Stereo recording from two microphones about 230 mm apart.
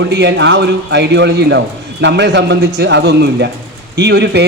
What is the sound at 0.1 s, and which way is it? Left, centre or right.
A man's voice, right.